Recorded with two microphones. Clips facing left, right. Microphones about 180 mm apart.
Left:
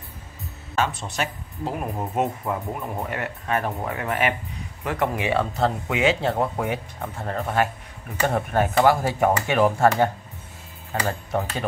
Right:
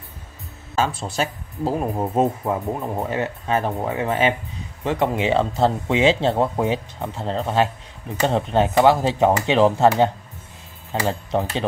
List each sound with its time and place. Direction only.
0.7 s speech: 30° right (ahead or behind)
11.1 s speech: 20° right (ahead or behind)